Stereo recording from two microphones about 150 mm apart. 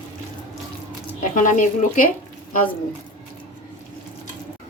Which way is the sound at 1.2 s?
55° left (ahead or behind).